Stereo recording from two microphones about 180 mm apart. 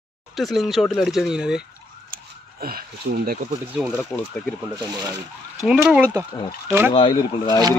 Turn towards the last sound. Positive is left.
turn(degrees=25)  # may be behind; listen again after turning